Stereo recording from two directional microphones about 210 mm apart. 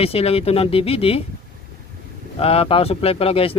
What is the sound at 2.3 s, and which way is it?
Speech, 25° left (ahead or behind).